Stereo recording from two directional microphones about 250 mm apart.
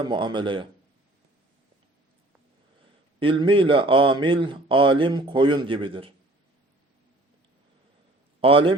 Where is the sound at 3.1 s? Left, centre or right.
Right.